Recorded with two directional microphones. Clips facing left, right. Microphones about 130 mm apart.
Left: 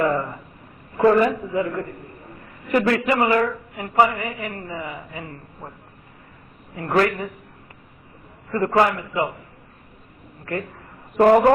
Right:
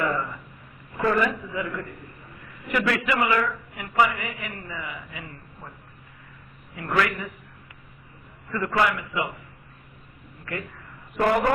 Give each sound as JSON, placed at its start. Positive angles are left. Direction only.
{"t": 0.0, "sound": "a woman's voice", "side_deg": 35}
{"t": 6.7, "sound": "a woman's voice", "side_deg": 35}
{"t": 8.5, "sound": "a woman's voice", "side_deg": 35}
{"t": 10.5, "sound": "a man's voice", "side_deg": 40}